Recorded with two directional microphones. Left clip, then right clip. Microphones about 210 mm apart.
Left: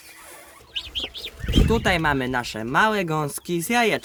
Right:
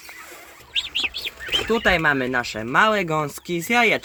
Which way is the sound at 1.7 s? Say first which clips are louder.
Right 3 dB; 25° left (ahead or behind).